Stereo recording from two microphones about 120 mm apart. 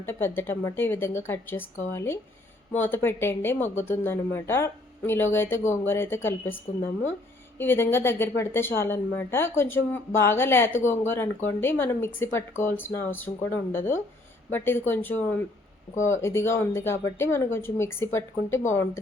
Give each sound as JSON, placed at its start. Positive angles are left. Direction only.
{"t": 0.0, "sound": "a woman's voice", "side_deg": 20}